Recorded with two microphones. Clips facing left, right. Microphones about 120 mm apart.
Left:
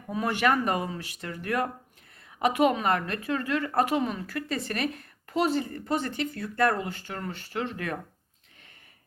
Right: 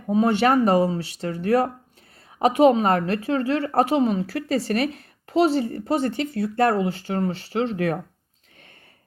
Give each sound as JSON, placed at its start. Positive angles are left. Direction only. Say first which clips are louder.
{"t": 0.1, "sound": "speech", "louder": "right 7 dB", "side_deg": -30}